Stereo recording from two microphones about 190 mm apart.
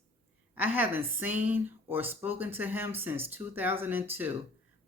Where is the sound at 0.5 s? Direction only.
10° right (ahead or behind).